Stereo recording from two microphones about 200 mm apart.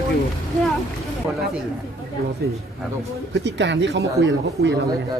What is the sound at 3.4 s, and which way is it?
Speech, 65° right (ahead or behind).